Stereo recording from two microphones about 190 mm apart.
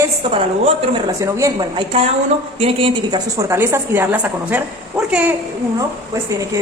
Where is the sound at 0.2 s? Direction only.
25° right (ahead or behind); by 5.3 s 5° right (ahead or behind).